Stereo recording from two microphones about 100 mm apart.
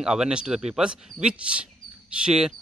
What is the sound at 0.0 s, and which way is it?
Speech, 5° right (ahead or behind).